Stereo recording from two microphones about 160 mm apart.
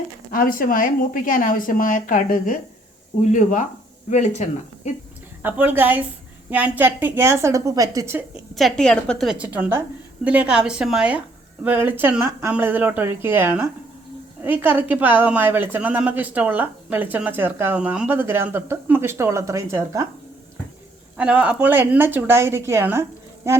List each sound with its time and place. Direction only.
0.3 s speech: 60° left (ahead or behind); by 4.9 s 45° left (ahead or behind)
5.4 s a woman's voice: 10° right (ahead or behind)
8.5 s a woman's voice: 5° left (ahead or behind); by 20.1 s 20° right (ahead or behind)
21.2 s a woman's voice: 5° right (ahead or behind)